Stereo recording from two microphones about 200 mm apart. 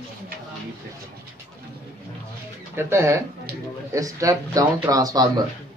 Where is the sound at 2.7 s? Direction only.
10° right (ahead or behind).